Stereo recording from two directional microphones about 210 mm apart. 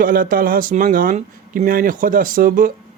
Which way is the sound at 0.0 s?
40° right (ahead or behind).